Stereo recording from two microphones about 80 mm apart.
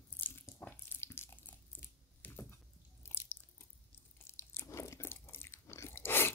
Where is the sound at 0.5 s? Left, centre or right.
Left.